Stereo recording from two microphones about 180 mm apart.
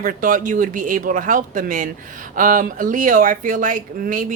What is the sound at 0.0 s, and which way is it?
Speech, 50° right (ahead or behind).